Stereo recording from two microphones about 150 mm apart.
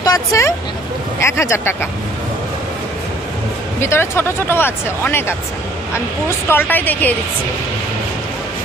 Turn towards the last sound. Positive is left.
turn(degrees=10)  # may be behind; listen again after turning